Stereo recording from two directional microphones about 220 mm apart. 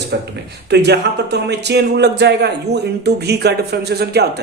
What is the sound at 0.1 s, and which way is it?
Speech, 50° right (ahead or behind).